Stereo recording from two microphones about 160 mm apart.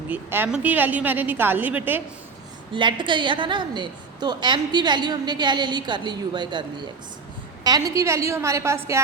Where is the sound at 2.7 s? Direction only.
30° right (ahead or behind).